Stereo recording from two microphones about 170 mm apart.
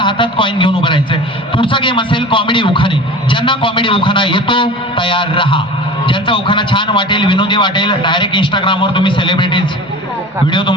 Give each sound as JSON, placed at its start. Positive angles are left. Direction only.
{"t": 0.0, "sound": "a man's voice", "side_deg": 30}